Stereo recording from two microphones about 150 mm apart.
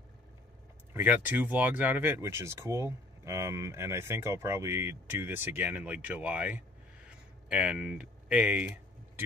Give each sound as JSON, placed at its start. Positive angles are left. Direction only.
{"t": 0.9, "sound": "speech", "side_deg": -10}